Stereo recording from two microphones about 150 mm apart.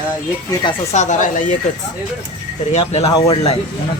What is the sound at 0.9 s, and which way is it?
Speech, 55° left (ahead or behind).